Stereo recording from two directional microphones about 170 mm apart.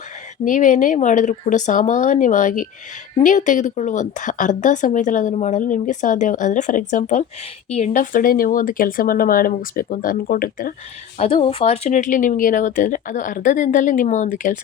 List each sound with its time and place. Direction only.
0.4 s a woman's voice: 50° left (ahead or behind)
11.2 s a woman's voice: 35° left (ahead or behind); by 14.6 s 50° left (ahead or behind)